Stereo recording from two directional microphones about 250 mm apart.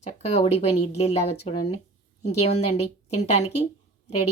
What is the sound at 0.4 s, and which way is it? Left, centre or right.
Speech, left.